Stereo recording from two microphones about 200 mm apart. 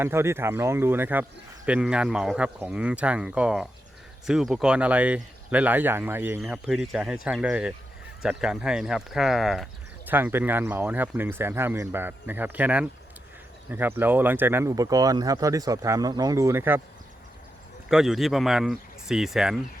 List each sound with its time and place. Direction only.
0.0 s speech: 15° right (ahead or behind)
17.8 s speech: centre (ahead or behind)